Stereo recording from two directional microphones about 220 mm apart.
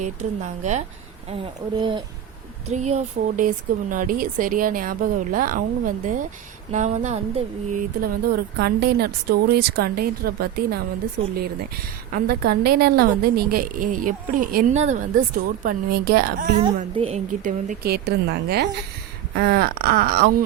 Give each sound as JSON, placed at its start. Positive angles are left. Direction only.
{"t": 0.0, "sound": "speech", "side_deg": -35}
{"t": 1.8, "sound": "speech", "side_deg": -20}
{"t": 8.0, "sound": "a woman's voice", "side_deg": -45}
{"t": 11.2, "sound": "speech", "side_deg": -80}
{"t": 12.1, "sound": "a woman's voice", "side_deg": -45}
{"t": 16.9, "sound": "a woman's voice", "side_deg": -25}